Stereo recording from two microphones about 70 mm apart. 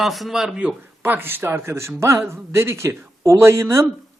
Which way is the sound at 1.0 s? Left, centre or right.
Right.